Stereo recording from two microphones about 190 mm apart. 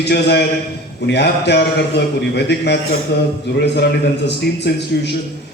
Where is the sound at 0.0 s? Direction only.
60° left (ahead or behind).